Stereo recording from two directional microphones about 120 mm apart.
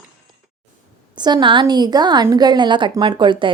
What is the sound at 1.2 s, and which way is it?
A woman's voice, 40° right (ahead or behind).